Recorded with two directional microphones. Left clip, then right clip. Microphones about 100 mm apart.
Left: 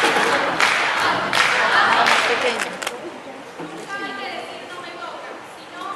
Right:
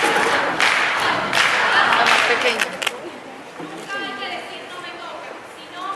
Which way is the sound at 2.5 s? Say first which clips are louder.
Right 3 dB; 20° right (ahead or behind).